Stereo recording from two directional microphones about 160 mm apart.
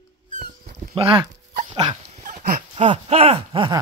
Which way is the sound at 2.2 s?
55° right (ahead or behind).